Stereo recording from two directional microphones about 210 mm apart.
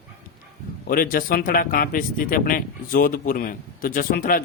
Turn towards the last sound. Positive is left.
turn(degrees=40)  # may be behind; listen again after turning